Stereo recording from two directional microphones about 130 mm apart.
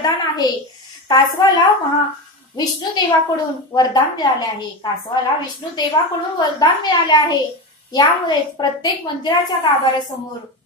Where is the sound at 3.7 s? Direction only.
30° left (ahead or behind).